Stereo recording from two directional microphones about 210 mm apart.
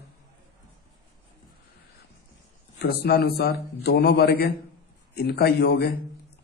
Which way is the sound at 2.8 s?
50° left (ahead or behind).